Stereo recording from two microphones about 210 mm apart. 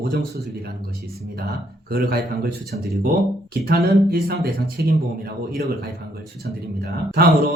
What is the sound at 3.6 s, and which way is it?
Speech, 45° right (ahead or behind).